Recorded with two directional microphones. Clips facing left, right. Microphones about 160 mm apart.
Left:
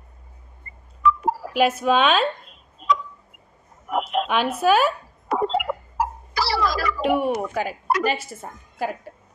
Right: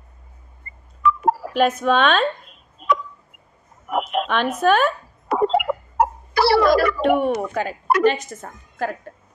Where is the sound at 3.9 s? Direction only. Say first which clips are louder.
Right 1 dB; 55° right (ahead or behind).